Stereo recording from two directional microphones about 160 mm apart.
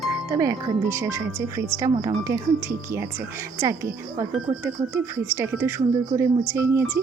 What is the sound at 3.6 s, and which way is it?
Speech, 20° right (ahead or behind).